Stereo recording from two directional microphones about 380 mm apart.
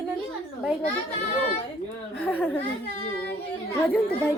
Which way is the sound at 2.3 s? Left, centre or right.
Centre.